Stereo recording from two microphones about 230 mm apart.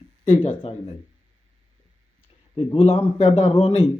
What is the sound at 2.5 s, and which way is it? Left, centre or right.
A man's voice, left.